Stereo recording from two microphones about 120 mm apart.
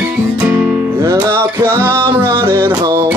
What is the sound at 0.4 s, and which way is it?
Music, 15° right (ahead or behind).